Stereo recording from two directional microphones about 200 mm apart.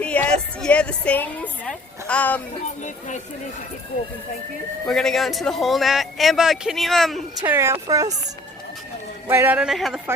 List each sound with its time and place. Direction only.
0.0 s a woman's voice: 5° left (ahead or behind)
4.9 s speech: centre (ahead or behind)
7.5 s speech: 15° right (ahead or behind)
9.3 s speech: 10° right (ahead or behind)